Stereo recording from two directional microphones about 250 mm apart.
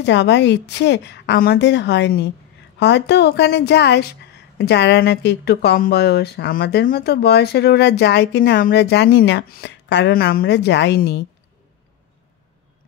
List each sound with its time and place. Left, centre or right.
0.0 s a woman's voice: left